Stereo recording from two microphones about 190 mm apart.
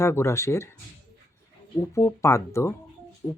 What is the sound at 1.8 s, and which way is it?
Speech, 15° left (ahead or behind).